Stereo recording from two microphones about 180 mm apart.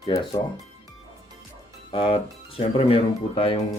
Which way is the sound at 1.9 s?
30° left (ahead or behind).